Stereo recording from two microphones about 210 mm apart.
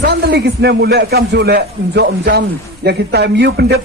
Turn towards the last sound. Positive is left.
turn(degrees=-50)  # may be behind; listen again after turning